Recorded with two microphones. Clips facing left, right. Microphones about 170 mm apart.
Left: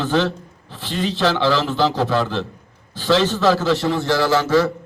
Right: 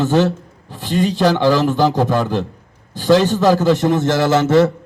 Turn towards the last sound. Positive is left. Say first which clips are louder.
# right 4 dB
turn(degrees=-25)  # may be behind; listen again after turning